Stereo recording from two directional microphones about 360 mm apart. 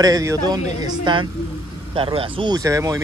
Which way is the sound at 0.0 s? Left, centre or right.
Centre.